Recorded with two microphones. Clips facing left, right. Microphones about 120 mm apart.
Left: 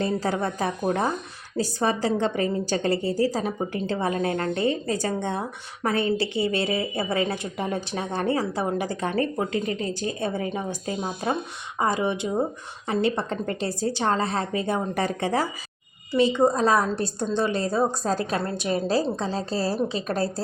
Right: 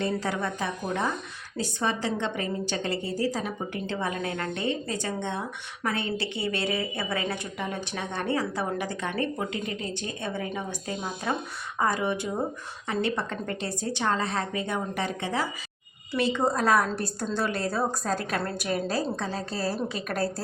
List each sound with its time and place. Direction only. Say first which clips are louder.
0.0 s a woman's voice: left 3 dB; 35° left (ahead or behind)
16.1 s a woman's voice: left 5 dB; 15° left (ahead or behind)